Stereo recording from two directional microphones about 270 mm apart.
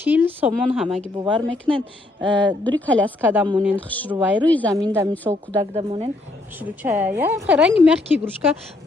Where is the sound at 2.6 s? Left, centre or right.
Centre.